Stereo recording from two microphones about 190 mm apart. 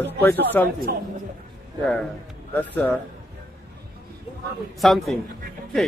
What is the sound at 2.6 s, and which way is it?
Speech, 10° left (ahead or behind).